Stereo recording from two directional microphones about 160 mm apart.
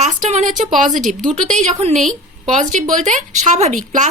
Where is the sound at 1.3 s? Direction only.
45° right (ahead or behind).